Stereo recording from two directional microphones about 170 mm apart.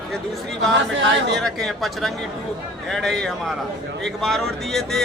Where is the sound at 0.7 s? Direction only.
90° right.